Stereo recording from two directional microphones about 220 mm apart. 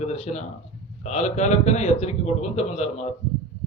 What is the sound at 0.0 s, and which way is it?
A man's voice, 30° left (ahead or behind).